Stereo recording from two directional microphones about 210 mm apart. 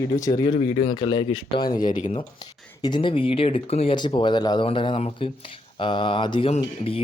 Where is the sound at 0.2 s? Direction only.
20° left (ahead or behind).